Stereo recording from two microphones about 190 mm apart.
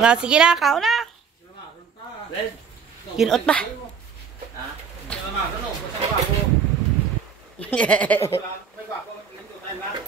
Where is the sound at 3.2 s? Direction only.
Centre (ahead or behind).